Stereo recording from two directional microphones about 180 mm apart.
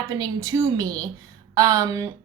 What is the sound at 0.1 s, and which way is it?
A woman's voice, 20° right (ahead or behind).